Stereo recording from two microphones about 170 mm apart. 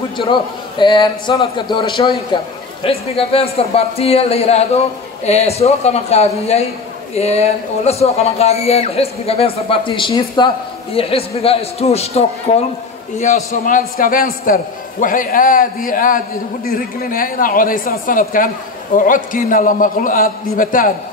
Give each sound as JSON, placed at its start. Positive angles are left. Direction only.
{"t": 0.2, "sound": "a man's voice", "side_deg": 30}